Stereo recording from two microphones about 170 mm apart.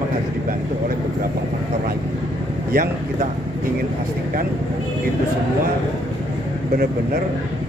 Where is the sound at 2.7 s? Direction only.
55° right (ahead or behind).